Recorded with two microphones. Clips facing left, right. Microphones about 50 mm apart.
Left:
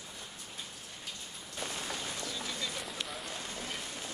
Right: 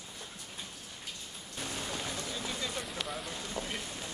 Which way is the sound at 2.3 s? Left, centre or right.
Centre.